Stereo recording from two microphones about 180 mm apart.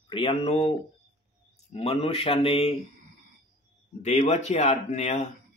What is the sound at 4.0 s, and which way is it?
Speech, 40° left (ahead or behind).